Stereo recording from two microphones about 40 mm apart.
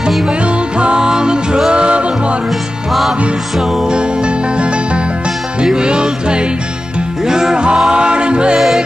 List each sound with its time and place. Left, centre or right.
0.3 s music: right
2.9 s music: centre
3.8 s music: right
8.5 s music: centre